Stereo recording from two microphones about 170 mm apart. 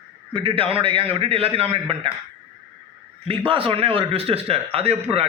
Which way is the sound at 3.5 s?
30° right (ahead or behind).